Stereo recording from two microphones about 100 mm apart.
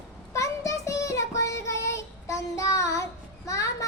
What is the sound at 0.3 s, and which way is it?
Child singing, 30° left (ahead or behind).